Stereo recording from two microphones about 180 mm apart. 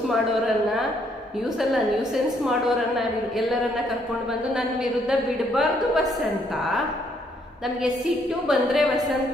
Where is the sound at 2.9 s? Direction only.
Centre (ahead or behind).